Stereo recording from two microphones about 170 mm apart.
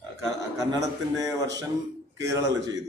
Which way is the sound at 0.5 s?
20° right (ahead or behind).